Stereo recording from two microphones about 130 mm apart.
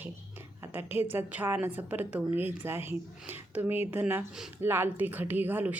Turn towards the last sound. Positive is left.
turn(degrees=-15)  # may be behind; listen again after turning